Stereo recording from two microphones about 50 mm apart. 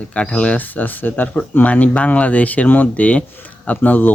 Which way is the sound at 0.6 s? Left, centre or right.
Left.